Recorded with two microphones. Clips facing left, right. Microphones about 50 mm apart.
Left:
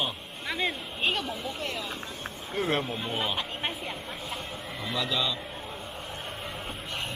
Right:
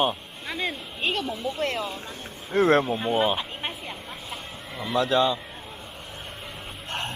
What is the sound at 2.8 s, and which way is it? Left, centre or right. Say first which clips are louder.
Speech: right 8 dB; centre.